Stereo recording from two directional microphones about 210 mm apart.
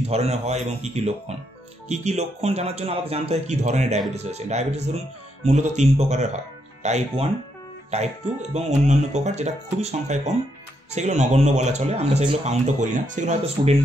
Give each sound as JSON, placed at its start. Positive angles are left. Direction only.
{"t": 0.0, "sound": "speech", "side_deg": -30}